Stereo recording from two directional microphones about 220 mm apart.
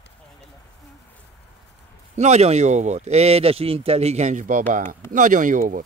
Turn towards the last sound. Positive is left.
turn(degrees=-35)  # may be behind; listen again after turning